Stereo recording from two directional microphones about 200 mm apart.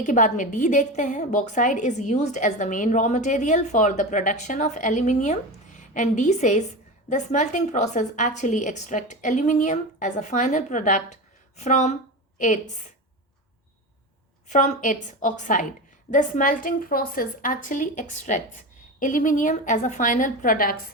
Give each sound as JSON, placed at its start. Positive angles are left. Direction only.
{"t": 0.0, "sound": "a woman's voice", "side_deg": 40}
{"t": 14.4, "sound": "a woman's voice", "side_deg": 35}